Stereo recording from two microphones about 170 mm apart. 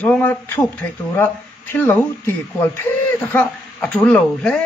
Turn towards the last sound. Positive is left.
turn(degrees=5)  # may be behind; listen again after turning